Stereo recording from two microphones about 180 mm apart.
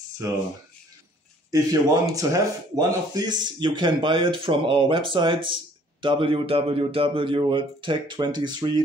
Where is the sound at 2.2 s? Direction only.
20° right (ahead or behind).